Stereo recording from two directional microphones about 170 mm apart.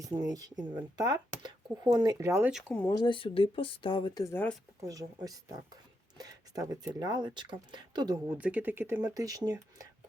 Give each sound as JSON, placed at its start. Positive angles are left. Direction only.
{"t": 0.0, "sound": "speech", "side_deg": -20}
{"t": 2.5, "sound": "speech", "side_deg": 0}
{"t": 2.9, "sound": "speech", "side_deg": 30}
{"t": 4.8, "sound": "speech", "side_deg": -20}
{"t": 8.4, "sound": "speech", "side_deg": -5}